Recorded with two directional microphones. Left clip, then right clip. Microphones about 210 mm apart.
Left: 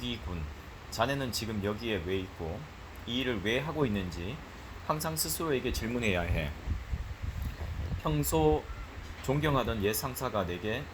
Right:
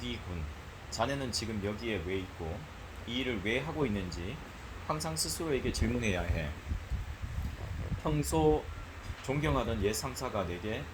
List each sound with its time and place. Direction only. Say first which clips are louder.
0.9 s speech: left 2 dB; 20° left (ahead or behind)
8.0 s speech: left 1 dB; 25° left (ahead or behind)